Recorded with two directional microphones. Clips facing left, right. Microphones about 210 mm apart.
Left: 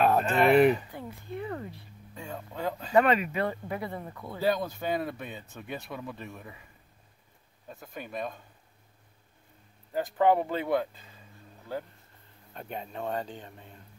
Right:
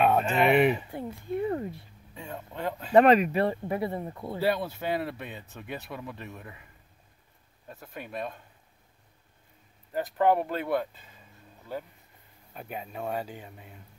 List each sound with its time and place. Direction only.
0.0 s speech: centre (ahead or behind)
0.9 s speech: 30° right (ahead or behind)
2.1 s speech: 5° right (ahead or behind)
2.9 s speech: 40° right (ahead or behind)
4.4 s speech: 5° right (ahead or behind)
9.9 s speech: centre (ahead or behind)
12.5 s speech: 5° right (ahead or behind)